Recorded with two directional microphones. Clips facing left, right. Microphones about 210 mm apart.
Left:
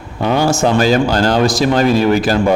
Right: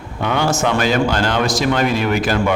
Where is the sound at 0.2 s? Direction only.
35° left (ahead or behind).